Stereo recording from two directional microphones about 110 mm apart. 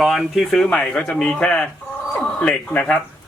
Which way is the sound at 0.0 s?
Centre (ahead or behind).